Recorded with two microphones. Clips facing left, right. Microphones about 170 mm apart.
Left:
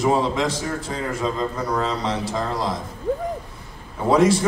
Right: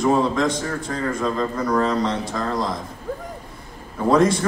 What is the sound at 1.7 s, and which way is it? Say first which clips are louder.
Speech: right 5 dB; 5° left (ahead or behind).